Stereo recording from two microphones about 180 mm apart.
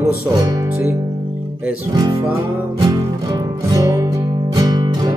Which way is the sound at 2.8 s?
20° right (ahead or behind).